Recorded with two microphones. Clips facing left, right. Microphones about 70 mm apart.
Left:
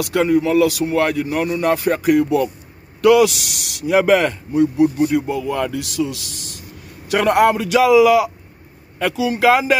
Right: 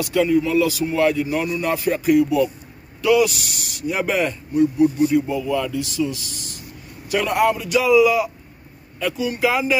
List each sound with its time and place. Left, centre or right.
0.0 s speech: left
3.0 s a man's voice: left
5.2 s a man's voice: left